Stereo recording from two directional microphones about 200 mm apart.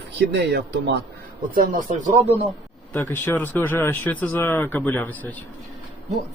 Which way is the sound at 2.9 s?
10° left (ahead or behind).